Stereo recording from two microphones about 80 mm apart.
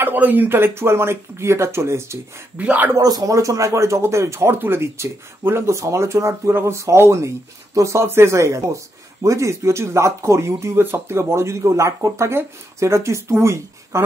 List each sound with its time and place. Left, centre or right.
0.0 s speech: right
2.5 s speech: right
3.0 s speech: right